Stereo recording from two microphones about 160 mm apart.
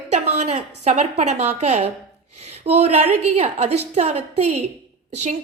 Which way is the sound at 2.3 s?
40° right (ahead or behind).